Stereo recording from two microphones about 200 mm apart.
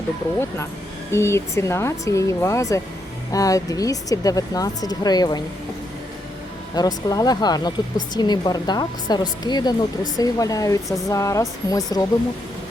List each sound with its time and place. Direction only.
1.1 s speech: 15° left (ahead or behind)
6.7 s speech: 20° left (ahead or behind)